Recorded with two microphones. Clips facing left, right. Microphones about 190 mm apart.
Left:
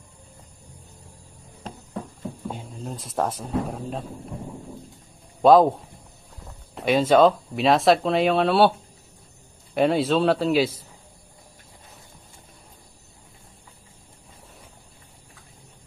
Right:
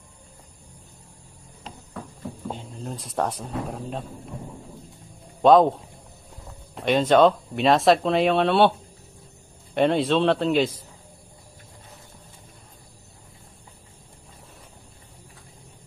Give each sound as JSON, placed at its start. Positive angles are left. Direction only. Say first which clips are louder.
{"t": 2.5, "sound": "speech", "louder": "right 2 dB", "side_deg": 5}
{"t": 5.4, "sound": "speech", "louder": "left 1 dB", "side_deg": 5}
{"t": 6.7, "sound": "speech", "louder": "even", "side_deg": 5}
{"t": 9.7, "sound": "speech", "louder": "even", "side_deg": 5}